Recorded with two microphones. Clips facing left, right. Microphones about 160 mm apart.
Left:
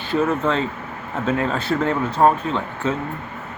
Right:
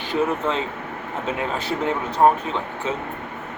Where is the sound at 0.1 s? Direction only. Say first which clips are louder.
Left 3 dB; 15° right (ahead or behind).